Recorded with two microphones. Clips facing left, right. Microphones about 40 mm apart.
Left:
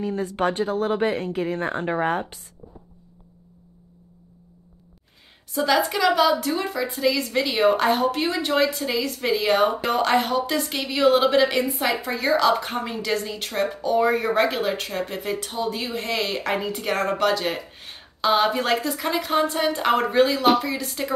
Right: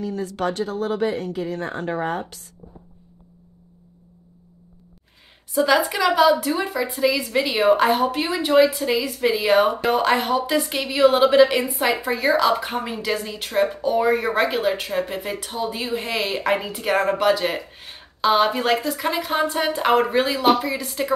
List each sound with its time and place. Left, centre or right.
0.0 s speech: left
5.5 s a woman's voice: centre